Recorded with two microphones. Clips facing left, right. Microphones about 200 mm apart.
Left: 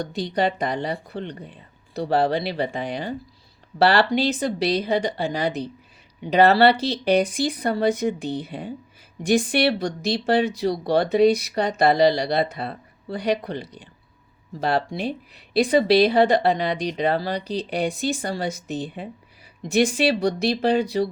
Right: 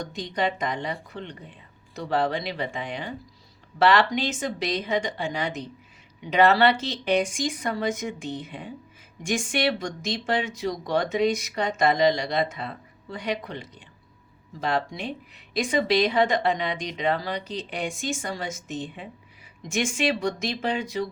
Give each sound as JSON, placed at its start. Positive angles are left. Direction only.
{"t": 0.0, "sound": "speech", "side_deg": 35}